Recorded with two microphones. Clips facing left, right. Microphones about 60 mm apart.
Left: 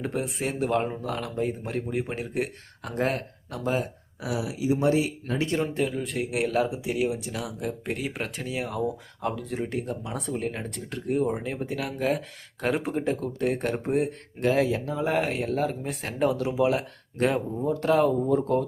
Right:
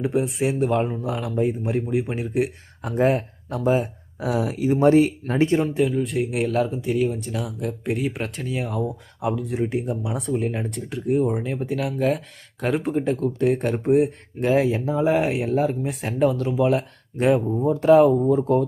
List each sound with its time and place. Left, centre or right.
0.0 s speech: centre
2.8 s speech: centre
4.2 s speech: right
5.7 s speech: centre
14.3 s speech: centre
17.2 s speech: centre